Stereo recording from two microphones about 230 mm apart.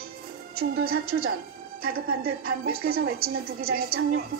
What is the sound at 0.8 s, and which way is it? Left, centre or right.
A woman's voice, right.